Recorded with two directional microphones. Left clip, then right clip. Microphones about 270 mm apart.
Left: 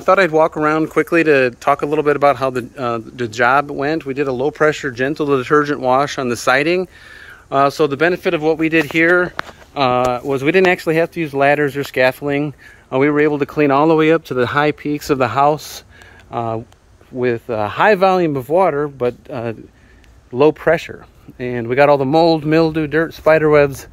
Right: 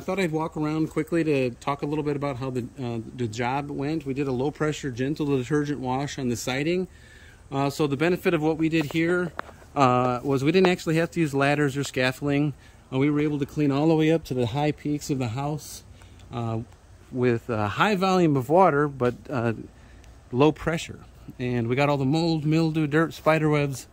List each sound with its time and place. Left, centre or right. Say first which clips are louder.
0.0 s speech: left 15 dB; centre
2.0 s speech: left 13 dB; left
2.2 s speech: left 16 dB; centre